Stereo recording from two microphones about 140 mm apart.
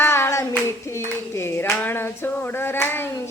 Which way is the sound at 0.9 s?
15° left (ahead or behind).